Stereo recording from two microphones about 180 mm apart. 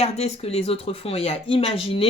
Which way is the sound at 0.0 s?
35° left (ahead or behind).